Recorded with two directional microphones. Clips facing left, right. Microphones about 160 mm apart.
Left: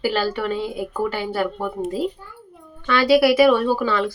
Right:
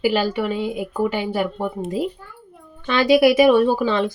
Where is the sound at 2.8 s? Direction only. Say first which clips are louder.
Right 1 dB; 20° right (ahead or behind).